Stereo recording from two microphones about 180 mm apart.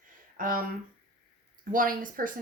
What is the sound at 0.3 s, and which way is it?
Speech, 50° right (ahead or behind).